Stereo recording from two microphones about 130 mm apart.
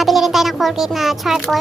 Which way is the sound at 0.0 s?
Centre (ahead or behind).